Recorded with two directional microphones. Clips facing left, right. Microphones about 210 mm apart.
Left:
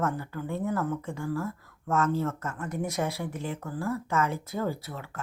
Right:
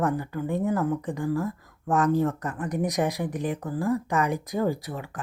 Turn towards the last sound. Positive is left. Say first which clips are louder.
# right 5 dB
turn(degrees=-15)  # may be behind; listen again after turning